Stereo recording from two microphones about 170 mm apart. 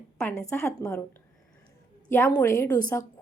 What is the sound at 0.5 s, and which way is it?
Speech, 15° left (ahead or behind).